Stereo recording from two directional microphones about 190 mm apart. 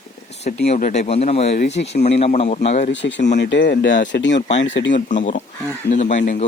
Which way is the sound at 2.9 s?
70° left (ahead or behind).